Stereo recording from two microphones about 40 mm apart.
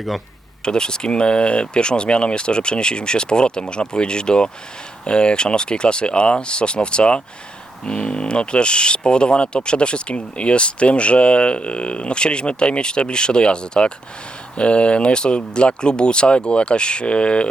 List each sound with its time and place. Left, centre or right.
0.6 s speech: centre